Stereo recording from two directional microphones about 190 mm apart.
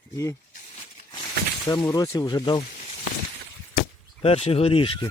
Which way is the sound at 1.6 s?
20° left (ahead or behind).